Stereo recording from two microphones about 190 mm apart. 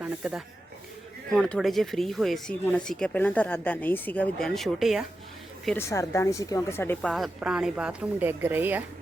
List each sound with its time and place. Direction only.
0.0 s speech: 5° right (ahead or behind)
5.6 s speech: 10° left (ahead or behind)
7.1 s speech: centre (ahead or behind)